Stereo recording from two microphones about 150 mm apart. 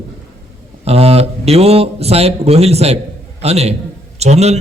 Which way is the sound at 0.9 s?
40° right (ahead or behind).